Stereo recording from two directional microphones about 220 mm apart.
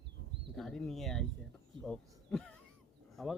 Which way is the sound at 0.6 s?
Centre (ahead or behind).